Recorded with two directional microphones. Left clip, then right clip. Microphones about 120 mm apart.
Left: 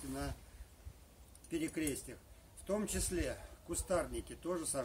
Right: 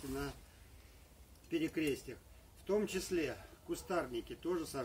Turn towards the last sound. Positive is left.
turn(degrees=20)  # may be behind; listen again after turning